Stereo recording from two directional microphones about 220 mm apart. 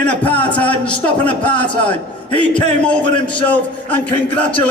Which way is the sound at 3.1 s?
25° left (ahead or behind).